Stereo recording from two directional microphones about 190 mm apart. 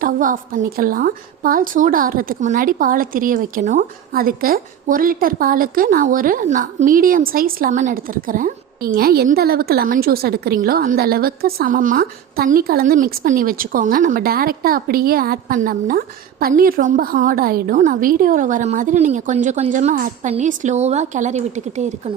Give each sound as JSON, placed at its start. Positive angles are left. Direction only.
{"t": 0.0, "sound": "a woman's voice", "side_deg": -45}